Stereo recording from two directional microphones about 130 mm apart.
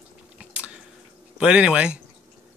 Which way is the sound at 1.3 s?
10° right (ahead or behind).